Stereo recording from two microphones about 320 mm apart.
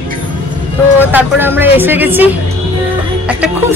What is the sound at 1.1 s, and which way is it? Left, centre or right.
Speech, centre.